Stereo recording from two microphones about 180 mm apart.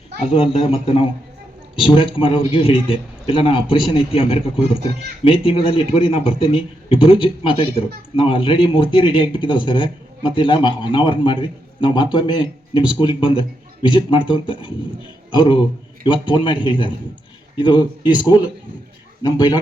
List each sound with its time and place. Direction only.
0.3 s speech: 30° left (ahead or behind)